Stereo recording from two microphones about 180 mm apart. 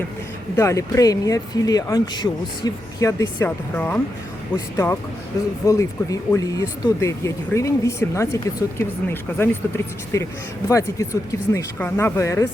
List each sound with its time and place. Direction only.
0.5 s speech: 15° left (ahead or behind)